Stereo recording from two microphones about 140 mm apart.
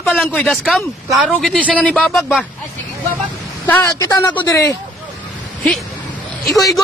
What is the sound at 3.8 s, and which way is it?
Speech, 25° left (ahead or behind).